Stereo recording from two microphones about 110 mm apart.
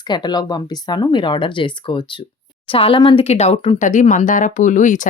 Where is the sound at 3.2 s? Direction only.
75° left (ahead or behind).